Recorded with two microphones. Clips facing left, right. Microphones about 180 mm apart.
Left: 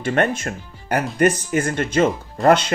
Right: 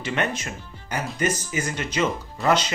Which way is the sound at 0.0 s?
50° left (ahead or behind).